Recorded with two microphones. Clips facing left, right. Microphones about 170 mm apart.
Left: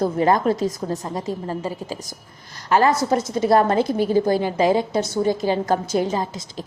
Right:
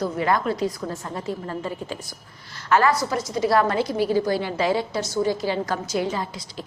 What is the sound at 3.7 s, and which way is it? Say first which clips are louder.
Speech: left 3 dB; 50° left (ahead or behind).